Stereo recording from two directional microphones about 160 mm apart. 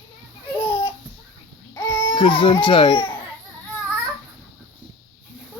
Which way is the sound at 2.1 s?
35° left (ahead or behind).